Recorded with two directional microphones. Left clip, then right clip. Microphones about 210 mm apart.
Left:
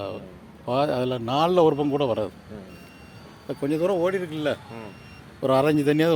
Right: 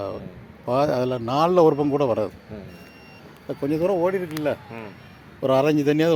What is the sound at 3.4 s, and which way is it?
A man's voice, 10° right (ahead or behind).